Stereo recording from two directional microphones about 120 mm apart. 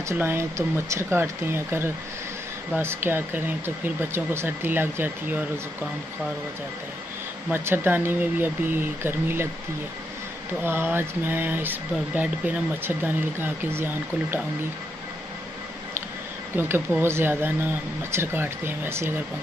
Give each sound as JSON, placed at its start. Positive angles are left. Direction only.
{"t": 0.2, "sound": "speech", "side_deg": -20}
{"t": 7.5, "sound": "speech", "side_deg": -15}
{"t": 10.6, "sound": "speech", "side_deg": -20}
{"t": 16.5, "sound": "speech", "side_deg": -20}